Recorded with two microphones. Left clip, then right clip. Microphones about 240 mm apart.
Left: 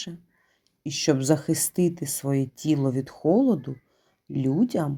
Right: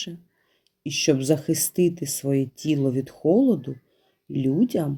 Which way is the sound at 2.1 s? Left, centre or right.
Left.